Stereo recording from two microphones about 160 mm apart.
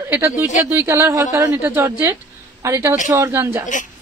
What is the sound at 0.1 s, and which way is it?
A woman's voice, 15° right (ahead or behind).